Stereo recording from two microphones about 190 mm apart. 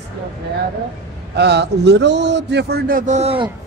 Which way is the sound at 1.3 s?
60° right (ahead or behind).